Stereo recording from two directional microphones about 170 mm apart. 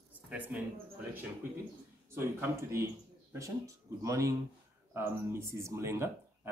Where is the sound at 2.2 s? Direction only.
15° right (ahead or behind).